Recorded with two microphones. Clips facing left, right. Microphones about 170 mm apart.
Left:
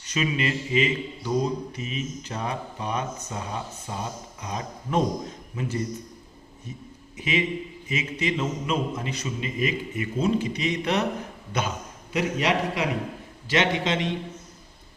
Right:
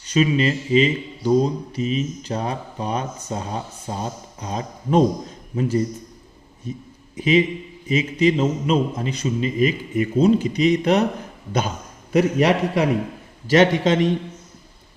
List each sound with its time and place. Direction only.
0.0 s speech: 30° right (ahead or behind)
7.2 s speech: 30° right (ahead or behind)
12.1 s a man's voice: 45° right (ahead or behind)